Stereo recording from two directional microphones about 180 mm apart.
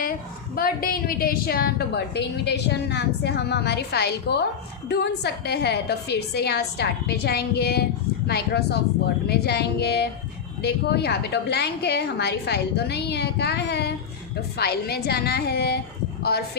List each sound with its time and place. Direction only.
0.5 s a woman's voice: 55° left (ahead or behind)
2.1 s a woman's voice: 70° left (ahead or behind)